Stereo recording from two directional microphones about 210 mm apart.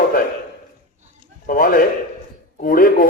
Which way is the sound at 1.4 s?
40° left (ahead or behind).